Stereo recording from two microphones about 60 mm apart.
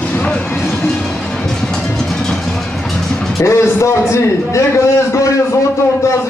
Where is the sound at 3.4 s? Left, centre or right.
Left.